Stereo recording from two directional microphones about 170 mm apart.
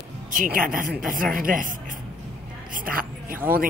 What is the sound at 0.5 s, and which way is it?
A woman's voice, 55° right (ahead or behind).